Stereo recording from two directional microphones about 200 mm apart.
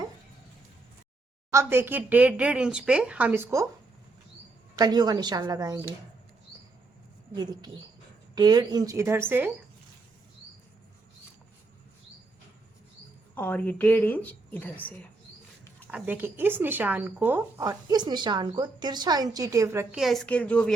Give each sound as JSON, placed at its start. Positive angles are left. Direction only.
{"t": 1.5, "sound": "speech", "side_deg": -10}
{"t": 4.8, "sound": "a woman's voice", "side_deg": -20}
{"t": 7.3, "sound": "a woman's voice", "side_deg": -20}
{"t": 13.3, "sound": "speech", "side_deg": 10}
{"t": 15.9, "sound": "speech", "side_deg": -10}
{"t": 20.0, "sound": "a woman's voice", "side_deg": 0}